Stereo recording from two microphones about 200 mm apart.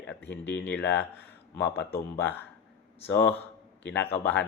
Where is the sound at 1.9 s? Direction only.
10° left (ahead or behind).